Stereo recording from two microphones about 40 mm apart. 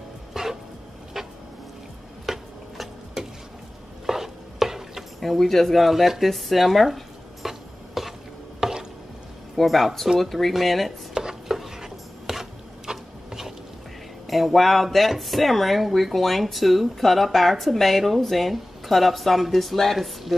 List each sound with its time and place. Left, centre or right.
0.3 s a sound: centre
2.2 s tick-tock: centre
4.0 s stir: centre
5.2 s speech: centre
7.4 s a sound: centre
8.5 s stir: centre
9.6 s speech: centre
11.4 s a sound: centre
14.2 s speech: centre